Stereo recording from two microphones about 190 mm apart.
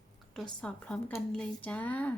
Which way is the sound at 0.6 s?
5° left (ahead or behind).